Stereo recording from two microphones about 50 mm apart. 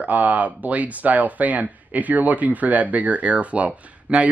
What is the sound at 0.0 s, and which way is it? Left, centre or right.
Speech, right.